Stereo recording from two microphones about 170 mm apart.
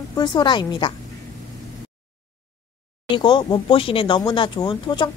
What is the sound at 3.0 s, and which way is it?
Speech, 30° left (ahead or behind).